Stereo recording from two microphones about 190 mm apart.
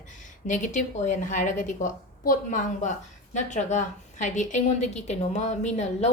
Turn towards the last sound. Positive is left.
turn(degrees=35)  # may be behind; listen again after turning